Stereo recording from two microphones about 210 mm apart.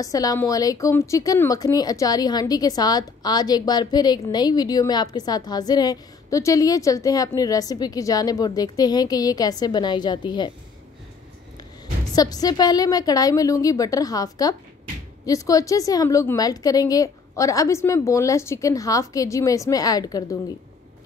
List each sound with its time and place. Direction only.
0.0 s a woman's voice: 15° left (ahead or behind)
12.2 s a woman's voice: 20° left (ahead or behind)